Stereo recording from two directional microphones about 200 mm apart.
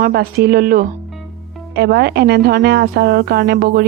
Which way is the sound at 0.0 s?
50° right (ahead or behind).